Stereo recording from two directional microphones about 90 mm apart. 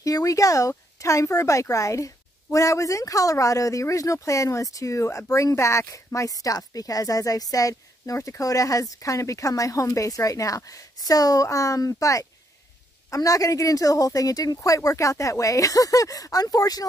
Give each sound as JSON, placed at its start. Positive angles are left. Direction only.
{"t": 0.0, "sound": "speech", "side_deg": 40}